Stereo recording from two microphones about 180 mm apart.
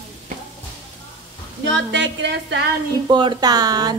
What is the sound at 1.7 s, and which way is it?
Speech, 90° right.